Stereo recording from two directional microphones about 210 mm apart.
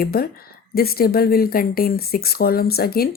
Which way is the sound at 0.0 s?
45° left (ahead or behind).